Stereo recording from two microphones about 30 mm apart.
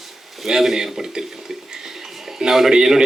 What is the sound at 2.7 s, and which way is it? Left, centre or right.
Speech, centre.